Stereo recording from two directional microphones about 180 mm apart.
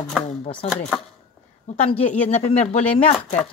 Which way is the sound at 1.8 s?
35° left (ahead or behind).